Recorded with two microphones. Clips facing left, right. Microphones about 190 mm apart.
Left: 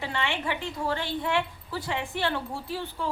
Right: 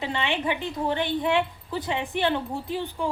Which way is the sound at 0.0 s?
20° right (ahead or behind).